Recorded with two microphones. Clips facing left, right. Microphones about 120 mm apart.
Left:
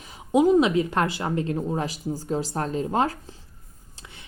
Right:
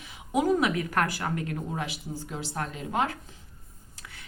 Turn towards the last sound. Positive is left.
turn(degrees=35)  # may be behind; listen again after turning